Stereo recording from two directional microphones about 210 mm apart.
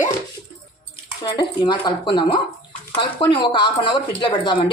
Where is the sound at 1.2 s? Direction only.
20° left (ahead or behind).